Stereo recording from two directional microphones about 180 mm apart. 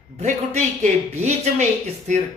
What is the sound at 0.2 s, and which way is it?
Speech, 40° right (ahead or behind).